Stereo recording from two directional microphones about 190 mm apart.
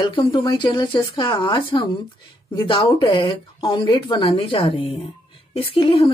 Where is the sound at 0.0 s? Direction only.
25° left (ahead or behind).